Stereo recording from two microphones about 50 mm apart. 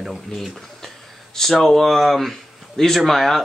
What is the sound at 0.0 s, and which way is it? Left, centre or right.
Speech, centre.